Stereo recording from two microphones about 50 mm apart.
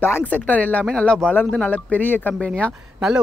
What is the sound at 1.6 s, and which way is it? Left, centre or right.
Speech, left.